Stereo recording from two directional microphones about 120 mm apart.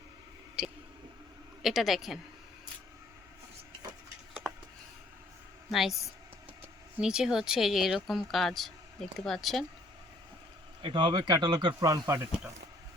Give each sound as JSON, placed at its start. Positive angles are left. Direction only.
{"t": 0.6, "sound": "a sound", "side_deg": -5}
{"t": 1.6, "sound": "speech", "side_deg": 0}
{"t": 5.7, "sound": "speech", "side_deg": 0}
{"t": 7.0, "sound": "speech", "side_deg": -5}
{"t": 10.8, "sound": "speech", "side_deg": -35}